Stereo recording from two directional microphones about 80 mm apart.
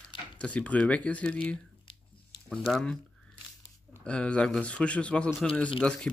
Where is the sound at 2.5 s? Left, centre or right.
Centre.